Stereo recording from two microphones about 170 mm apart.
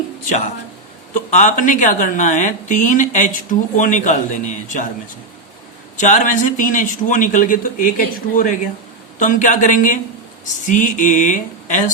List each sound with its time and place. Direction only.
0.3 s speech: 45° left (ahead or behind)
6.0 s speech: 45° left (ahead or behind)